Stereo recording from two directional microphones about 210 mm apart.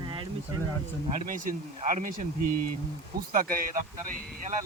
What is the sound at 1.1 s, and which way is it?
Speech, 40° right (ahead or behind).